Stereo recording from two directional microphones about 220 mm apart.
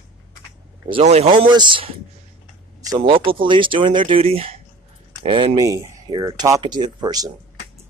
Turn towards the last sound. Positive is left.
turn(degrees=-20)  # may be behind; listen again after turning